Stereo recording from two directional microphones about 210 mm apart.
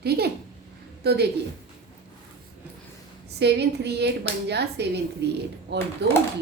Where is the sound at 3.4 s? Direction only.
50° right (ahead or behind).